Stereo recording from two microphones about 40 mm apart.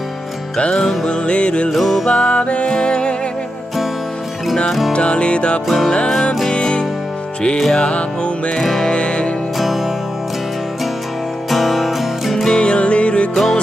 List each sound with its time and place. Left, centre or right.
0.6 s music: left
1.7 s music: centre
2.0 s music: left
4.9 s music: left
8.6 s music: centre
8.9 s music: left
9.6 s music: centre
11.4 s music: centre
12.5 s music: left
13.3 s music: centre